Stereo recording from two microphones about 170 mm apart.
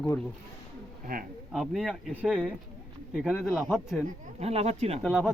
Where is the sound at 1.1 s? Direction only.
55° right (ahead or behind).